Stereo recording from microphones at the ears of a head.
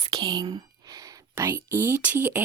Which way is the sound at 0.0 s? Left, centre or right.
Right.